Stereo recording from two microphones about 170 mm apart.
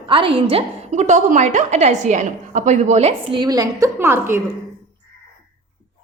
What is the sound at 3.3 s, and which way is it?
A woman's voice, 25° right (ahead or behind).